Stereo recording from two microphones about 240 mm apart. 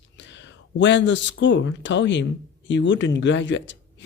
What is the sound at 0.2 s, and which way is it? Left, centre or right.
Speech, left.